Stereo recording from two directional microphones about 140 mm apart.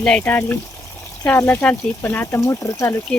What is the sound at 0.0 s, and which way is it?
Speech, 10° left (ahead or behind).